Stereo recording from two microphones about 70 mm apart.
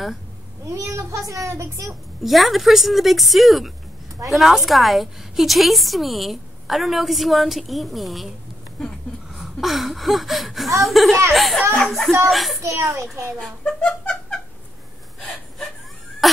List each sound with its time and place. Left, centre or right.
0.7 s speech: right
1.9 s a woman's voice: centre
9.3 s a sound: centre
10.8 s a woman's voice: centre
12.6 s speech: right
13.4 s speech: centre